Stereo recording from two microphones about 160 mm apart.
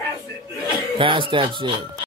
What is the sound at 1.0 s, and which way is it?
Speech, 30° right (ahead or behind).